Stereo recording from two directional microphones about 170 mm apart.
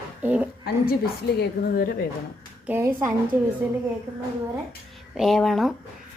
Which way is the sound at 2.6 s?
15° right (ahead or behind).